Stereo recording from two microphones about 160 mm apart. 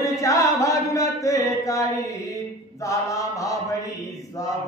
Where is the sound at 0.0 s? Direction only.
20° left (ahead or behind).